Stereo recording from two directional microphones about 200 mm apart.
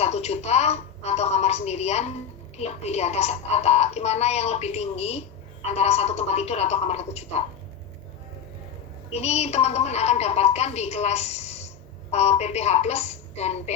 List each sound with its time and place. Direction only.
0.0 s a woman's voice: 30° left (ahead or behind)
9.2 s a woman's voice: 30° left (ahead or behind)